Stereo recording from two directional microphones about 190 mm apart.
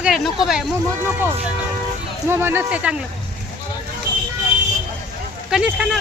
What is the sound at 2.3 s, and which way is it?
Speech, 10° right (ahead or behind).